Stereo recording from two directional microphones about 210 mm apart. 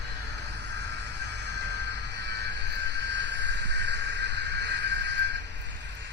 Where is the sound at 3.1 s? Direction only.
55° right (ahead or behind).